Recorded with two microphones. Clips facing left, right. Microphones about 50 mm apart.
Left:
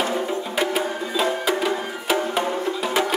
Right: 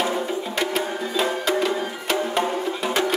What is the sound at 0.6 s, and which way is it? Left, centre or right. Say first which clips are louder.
Music: left 2 dB; centre.